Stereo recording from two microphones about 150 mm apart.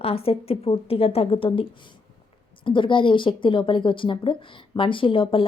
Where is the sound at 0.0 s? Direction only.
40° left (ahead or behind).